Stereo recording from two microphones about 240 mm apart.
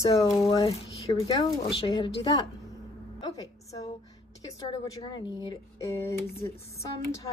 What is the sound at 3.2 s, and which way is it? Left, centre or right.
Speech, centre.